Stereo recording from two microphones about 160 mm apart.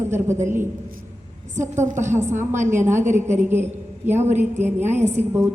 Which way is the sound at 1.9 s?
15° right (ahead or behind).